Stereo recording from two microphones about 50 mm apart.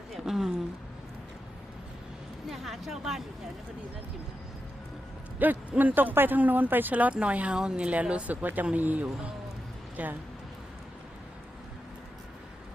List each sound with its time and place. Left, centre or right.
0.1 s a sound: centre
2.5 s speech: centre
5.4 s speech: right; by 7.9 s centre
8.3 s speech: right